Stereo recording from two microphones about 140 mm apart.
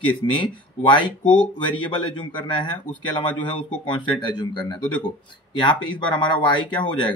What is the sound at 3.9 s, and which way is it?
Speech, 35° left (ahead or behind).